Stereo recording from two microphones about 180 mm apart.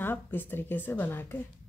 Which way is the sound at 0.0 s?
10° left (ahead or behind).